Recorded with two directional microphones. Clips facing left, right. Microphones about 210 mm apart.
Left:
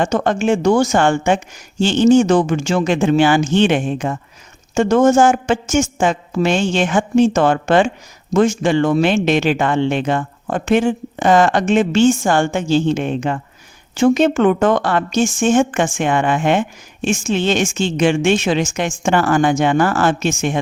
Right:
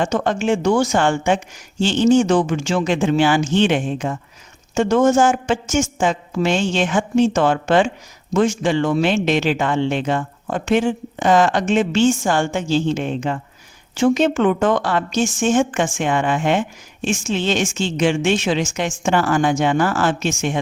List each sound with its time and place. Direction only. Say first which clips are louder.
0.0 s a woman's voice: left 3 dB; 50° left (ahead or behind)
4.7 s a woman's voice: left 2 dB; 45° left (ahead or behind)